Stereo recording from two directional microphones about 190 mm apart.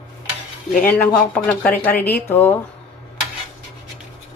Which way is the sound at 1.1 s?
5° left (ahead or behind).